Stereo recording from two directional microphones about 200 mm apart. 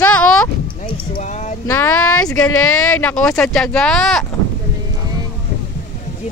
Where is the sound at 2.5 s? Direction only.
90° left.